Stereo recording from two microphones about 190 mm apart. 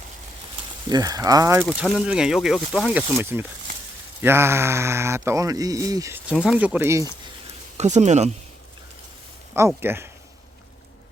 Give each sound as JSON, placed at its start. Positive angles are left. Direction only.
{"t": 0.9, "sound": "speech", "side_deg": -20}
{"t": 1.6, "sound": "speech", "side_deg": 0}
{"t": 7.8, "sound": "speech", "side_deg": -35}
{"t": 9.6, "sound": "speech", "side_deg": -15}